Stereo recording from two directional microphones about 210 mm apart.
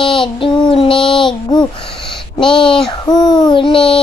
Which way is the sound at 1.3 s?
20° left (ahead or behind).